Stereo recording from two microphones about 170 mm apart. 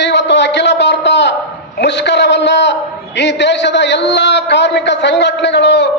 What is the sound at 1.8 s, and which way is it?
A man's voice, 90° left.